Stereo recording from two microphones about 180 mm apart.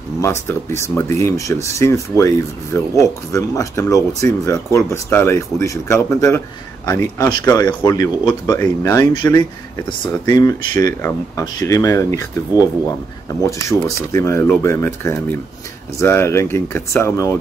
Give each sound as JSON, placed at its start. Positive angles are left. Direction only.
{"t": 0.2, "sound": "speech", "side_deg": 15}